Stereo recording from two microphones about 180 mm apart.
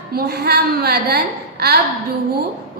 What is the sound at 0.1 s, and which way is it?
A woman's voice, 60° right (ahead or behind).